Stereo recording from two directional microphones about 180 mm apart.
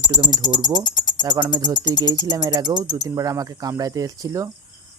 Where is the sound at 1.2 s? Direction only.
20° right (ahead or behind).